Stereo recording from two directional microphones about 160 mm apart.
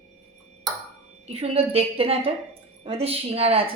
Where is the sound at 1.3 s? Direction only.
40° right (ahead or behind).